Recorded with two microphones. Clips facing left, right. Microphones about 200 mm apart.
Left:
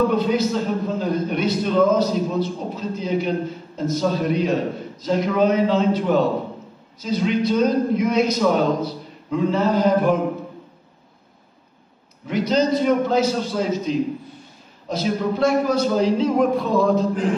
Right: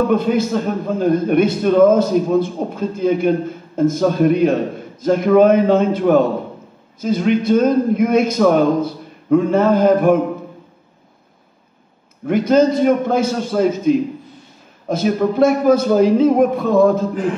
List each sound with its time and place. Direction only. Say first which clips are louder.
0.1 s a man's voice: right 4 dB; 50° right (ahead or behind)
12.3 s a man's voice: right 6 dB; 50° right (ahead or behind)